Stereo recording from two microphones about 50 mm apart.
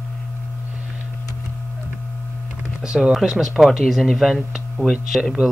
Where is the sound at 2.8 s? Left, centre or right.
Centre.